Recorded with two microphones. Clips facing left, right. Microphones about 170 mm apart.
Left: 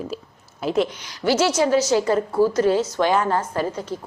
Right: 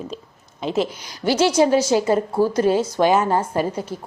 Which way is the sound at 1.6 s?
20° right (ahead or behind).